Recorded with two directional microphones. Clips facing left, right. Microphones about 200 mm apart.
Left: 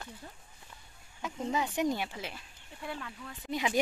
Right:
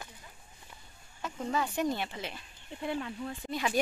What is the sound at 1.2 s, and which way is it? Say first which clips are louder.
A woman's voice: even; 15° left (ahead or behind).